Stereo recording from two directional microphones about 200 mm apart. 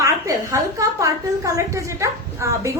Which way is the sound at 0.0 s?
15° right (ahead or behind).